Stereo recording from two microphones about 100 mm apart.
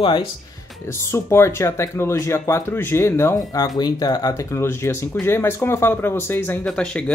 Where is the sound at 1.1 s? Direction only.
25° left (ahead or behind).